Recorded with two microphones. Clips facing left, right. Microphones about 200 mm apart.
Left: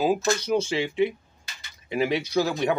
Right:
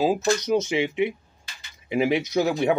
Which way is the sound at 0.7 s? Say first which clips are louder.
Right 1 dB; 20° right (ahead or behind).